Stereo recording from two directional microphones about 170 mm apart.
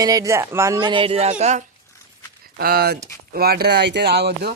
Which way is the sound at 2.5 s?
65° right (ahead or behind).